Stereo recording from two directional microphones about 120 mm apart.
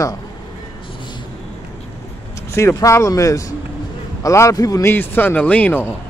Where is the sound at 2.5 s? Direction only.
25° left (ahead or behind).